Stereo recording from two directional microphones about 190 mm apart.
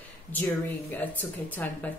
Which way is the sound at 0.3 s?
10° left (ahead or behind).